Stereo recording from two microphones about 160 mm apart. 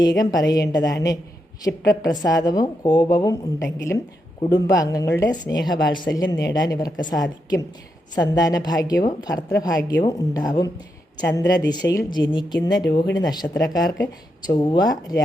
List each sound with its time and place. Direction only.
0.0 s a woman's voice: 25° left (ahead or behind)